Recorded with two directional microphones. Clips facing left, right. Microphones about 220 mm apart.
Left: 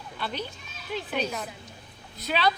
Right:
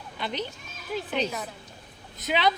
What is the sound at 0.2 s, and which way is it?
Speech, 20° right (ahead or behind).